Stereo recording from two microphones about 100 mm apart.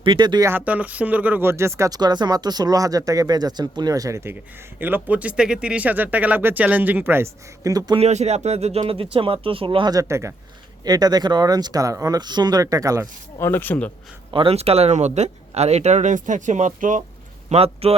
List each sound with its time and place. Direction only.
0.0 s speech: 50° right (ahead or behind)
0.6 s speech: 15° right (ahead or behind)
2.0 s speech: 45° right (ahead or behind); by 7.3 s 20° right (ahead or behind)
7.6 s speech: 40° right (ahead or behind)
7.9 s speech: 90° right; by 9.9 s 60° right (ahead or behind)
9.9 s speech: 30° right (ahead or behind)
10.8 s speech: 40° right (ahead or behind)
13.4 s speech: 20° left (ahead or behind)
14.3 s speech: 65° right (ahead or behind); by 15.9 s 90° right
17.5 s speech: 90° right